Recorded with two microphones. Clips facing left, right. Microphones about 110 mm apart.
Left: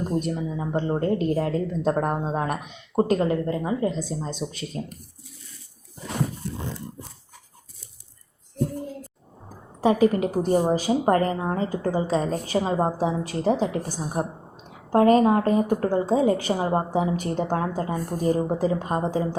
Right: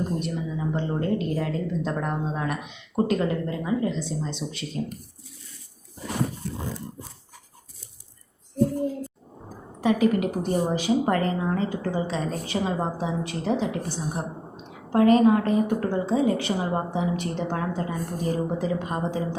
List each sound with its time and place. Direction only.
0.2 s a woman's voice: 40° left (ahead or behind)
9.8 s a woman's voice: 30° left (ahead or behind)